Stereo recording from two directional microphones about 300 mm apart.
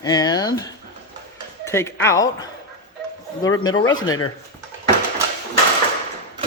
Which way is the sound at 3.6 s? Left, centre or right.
Centre.